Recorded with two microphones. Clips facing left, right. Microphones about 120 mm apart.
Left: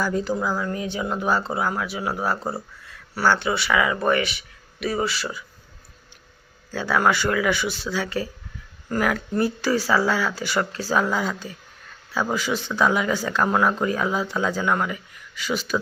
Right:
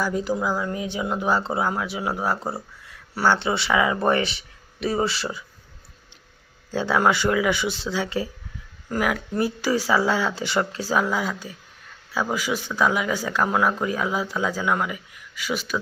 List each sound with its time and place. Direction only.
0.0 s speech: 10° right (ahead or behind); by 5.4 s 30° right (ahead or behind)
6.7 s speech: 20° right (ahead or behind); by 15.8 s centre (ahead or behind)